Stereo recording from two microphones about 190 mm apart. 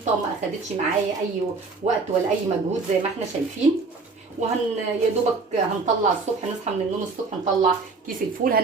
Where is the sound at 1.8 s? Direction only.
35° right (ahead or behind).